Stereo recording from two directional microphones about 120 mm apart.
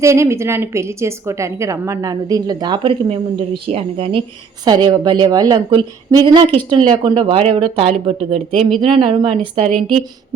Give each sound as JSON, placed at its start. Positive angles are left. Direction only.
{"t": 0.0, "sound": "a woman's voice", "side_deg": -25}
{"t": 3.7, "sound": "speech", "side_deg": -50}
{"t": 4.6, "sound": "a woman's voice", "side_deg": -35}